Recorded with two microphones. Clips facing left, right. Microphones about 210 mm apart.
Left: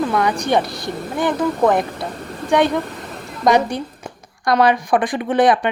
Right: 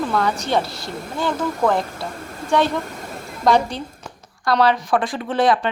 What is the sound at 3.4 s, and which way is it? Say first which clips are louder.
Speech: left 2 dB; 15° left (ahead or behind).